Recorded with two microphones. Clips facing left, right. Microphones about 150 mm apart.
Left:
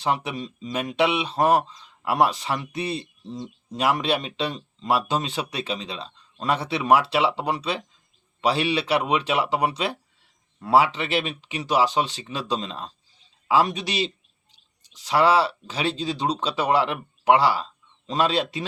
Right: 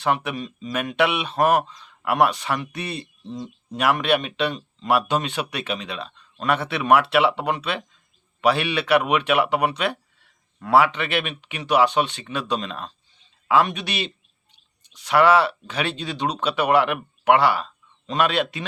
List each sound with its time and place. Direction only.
0.0 s speech: 25° left (ahead or behind)